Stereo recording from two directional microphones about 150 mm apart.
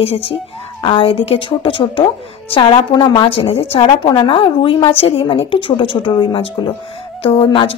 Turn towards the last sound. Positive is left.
turn(degrees=35)  # may be behind; listen again after turning